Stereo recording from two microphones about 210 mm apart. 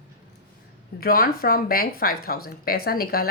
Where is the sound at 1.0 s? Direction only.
45° left (ahead or behind).